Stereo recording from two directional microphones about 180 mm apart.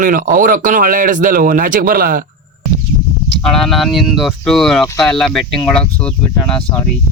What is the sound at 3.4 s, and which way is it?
Speech, centre (ahead or behind).